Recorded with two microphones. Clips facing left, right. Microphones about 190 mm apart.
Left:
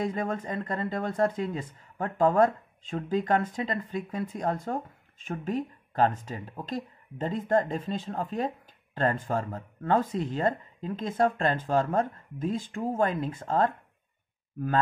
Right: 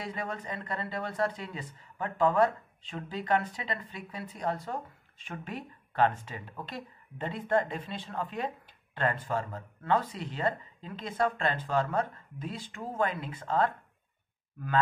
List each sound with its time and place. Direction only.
0.0 s speech: 45° left (ahead or behind)